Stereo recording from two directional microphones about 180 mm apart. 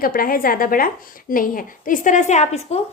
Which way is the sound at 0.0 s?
55° left (ahead or behind).